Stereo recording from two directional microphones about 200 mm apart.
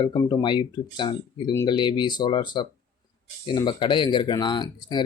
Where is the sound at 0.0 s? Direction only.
20° left (ahead or behind).